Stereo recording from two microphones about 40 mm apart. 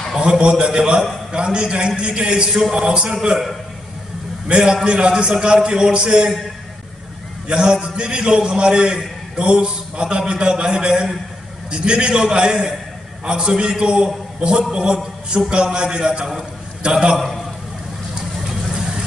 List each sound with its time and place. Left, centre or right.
0.2 s a man's voice: right
4.8 s a man's voice: right
7.4 s a man's voice: centre
18.7 s vehicle: centre